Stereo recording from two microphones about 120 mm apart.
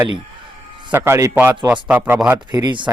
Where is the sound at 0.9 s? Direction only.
20° right (ahead or behind).